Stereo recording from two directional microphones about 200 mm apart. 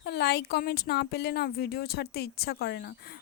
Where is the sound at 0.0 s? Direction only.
55° left (ahead or behind).